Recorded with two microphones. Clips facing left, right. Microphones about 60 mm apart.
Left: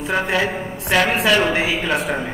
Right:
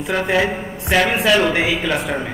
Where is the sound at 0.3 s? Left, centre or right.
Centre.